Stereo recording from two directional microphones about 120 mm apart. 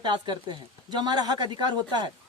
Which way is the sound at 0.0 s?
40° right (ahead or behind).